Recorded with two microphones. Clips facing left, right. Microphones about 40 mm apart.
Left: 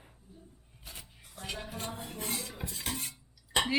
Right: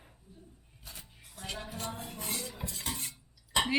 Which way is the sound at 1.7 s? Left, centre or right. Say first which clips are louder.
Even; left.